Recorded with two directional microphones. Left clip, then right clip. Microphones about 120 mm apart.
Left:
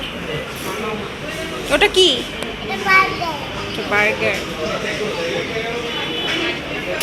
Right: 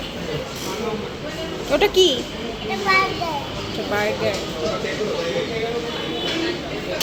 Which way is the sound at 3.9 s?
15° right (ahead or behind).